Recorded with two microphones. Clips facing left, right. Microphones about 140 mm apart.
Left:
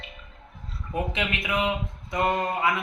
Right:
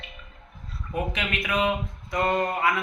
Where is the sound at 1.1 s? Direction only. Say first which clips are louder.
Even; 20° left (ahead or behind).